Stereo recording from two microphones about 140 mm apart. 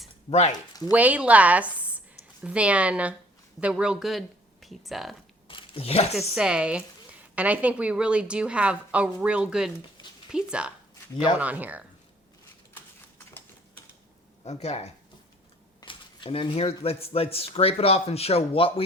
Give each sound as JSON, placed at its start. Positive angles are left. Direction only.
{"t": 0.3, "sound": "speech", "side_deg": 50}
{"t": 0.9, "sound": "speech", "side_deg": -10}
{"t": 5.5, "sound": "a sound", "side_deg": 40}
{"t": 6.3, "sound": "speech", "side_deg": -5}
{"t": 12.7, "sound": "horse", "side_deg": 15}
{"t": 14.4, "sound": "speech", "side_deg": 50}
{"t": 15.8, "sound": "speech", "side_deg": 35}